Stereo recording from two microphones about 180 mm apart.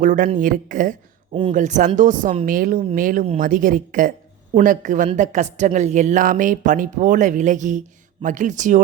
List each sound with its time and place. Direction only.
0.0 s a woman's voice: 45° right (ahead or behind)
1.3 s speech: 30° right (ahead or behind)
1.5 s a woman's voice: 45° right (ahead or behind)